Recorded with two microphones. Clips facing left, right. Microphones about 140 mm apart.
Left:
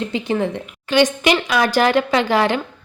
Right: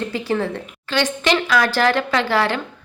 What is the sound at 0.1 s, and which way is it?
A woman's voice, 20° left (ahead or behind).